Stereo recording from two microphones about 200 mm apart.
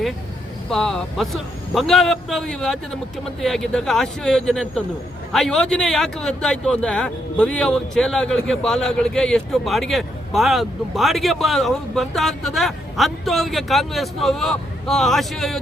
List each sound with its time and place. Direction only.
0.7 s speech: 5° left (ahead or behind)